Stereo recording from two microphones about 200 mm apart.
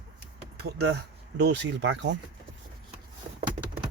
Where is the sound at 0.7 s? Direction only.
60° right (ahead or behind).